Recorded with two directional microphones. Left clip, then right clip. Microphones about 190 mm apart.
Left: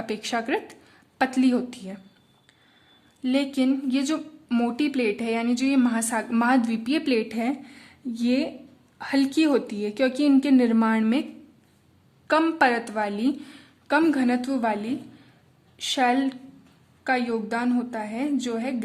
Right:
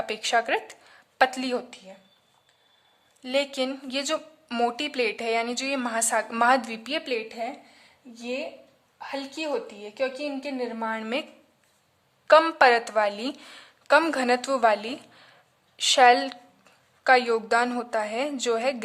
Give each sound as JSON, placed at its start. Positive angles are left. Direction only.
{"t": 0.0, "sound": "a woman's voice", "side_deg": -10}
{"t": 1.7, "sound": "a woman's voice", "side_deg": 5}
{"t": 3.2, "sound": "a woman's voice", "side_deg": -10}
{"t": 7.0, "sound": "a woman's voice", "side_deg": 0}
{"t": 12.3, "sound": "a woman's voice", "side_deg": -20}